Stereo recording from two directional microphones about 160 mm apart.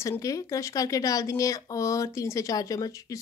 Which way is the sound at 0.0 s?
20° left (ahead or behind).